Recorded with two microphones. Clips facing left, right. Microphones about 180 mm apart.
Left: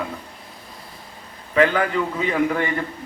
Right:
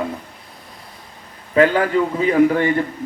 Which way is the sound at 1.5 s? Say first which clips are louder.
Right 3 dB; 35° right (ahead or behind).